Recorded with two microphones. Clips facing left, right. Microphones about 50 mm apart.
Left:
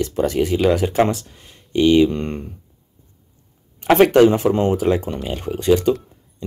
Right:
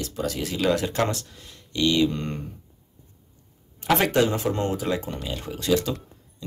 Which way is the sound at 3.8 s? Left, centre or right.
Left.